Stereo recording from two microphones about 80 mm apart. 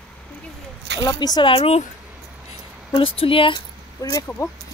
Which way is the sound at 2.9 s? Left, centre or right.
Left.